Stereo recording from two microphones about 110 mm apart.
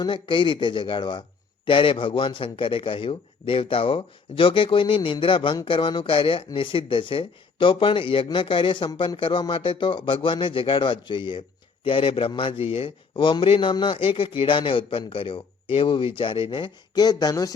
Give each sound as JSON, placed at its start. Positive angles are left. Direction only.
{"t": 0.0, "sound": "a man's voice", "side_deg": 50}